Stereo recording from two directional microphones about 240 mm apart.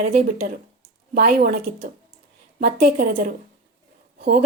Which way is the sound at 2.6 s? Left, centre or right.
Right.